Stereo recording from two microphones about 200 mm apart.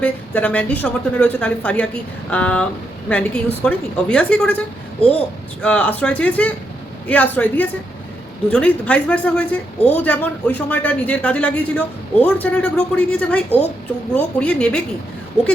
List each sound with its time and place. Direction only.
0.0 s a woman's voice: 5° left (ahead or behind)
4.9 s speech: 30° left (ahead or behind)
5.6 s a woman's voice: 5° left (ahead or behind)